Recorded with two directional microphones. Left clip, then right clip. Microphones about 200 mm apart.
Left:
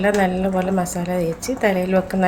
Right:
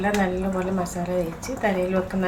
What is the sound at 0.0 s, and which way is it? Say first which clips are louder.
A woman's voice: left 5 dB; 55° left (ahead or behind).